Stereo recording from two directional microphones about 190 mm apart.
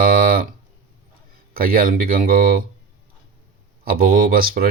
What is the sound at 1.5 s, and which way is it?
Speech, 50° right (ahead or behind).